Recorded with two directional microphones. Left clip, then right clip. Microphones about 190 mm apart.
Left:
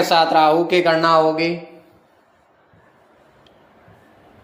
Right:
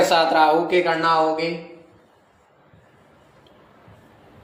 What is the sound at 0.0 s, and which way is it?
Speech, 30° left (ahead or behind).